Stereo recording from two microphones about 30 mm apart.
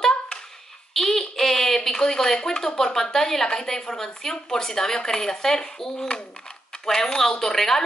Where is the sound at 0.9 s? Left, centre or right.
Centre.